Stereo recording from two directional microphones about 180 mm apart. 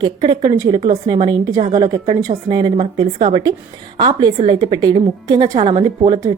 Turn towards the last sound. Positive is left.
turn(degrees=-25)  # may be behind; listen again after turning